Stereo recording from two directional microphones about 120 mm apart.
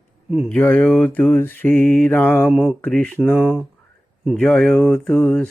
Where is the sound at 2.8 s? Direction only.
10° left (ahead or behind).